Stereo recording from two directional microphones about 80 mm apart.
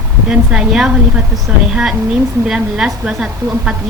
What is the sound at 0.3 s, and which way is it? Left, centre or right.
Speech, centre.